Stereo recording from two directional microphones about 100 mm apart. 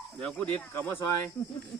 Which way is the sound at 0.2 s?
10° left (ahead or behind).